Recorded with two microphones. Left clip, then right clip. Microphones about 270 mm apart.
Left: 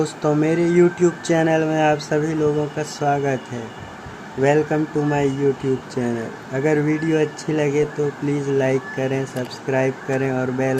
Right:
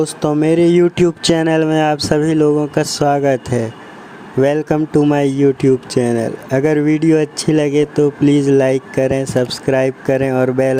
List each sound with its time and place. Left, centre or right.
0.0 s speech: right